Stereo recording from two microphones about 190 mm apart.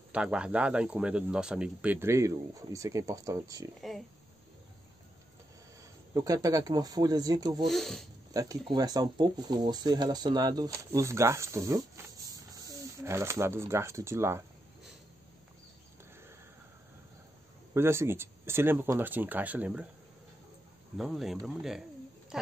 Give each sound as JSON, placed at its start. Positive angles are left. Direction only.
{"t": 0.1, "sound": "speech", "side_deg": -5}
{"t": 3.8, "sound": "speech", "side_deg": 0}
{"t": 6.1, "sound": "speech", "side_deg": -20}
{"t": 7.6, "sound": "speech", "side_deg": 0}
{"t": 8.3, "sound": "speech", "side_deg": -20}
{"t": 17.7, "sound": "speech", "side_deg": -15}
{"t": 21.0, "sound": "speech", "side_deg": 0}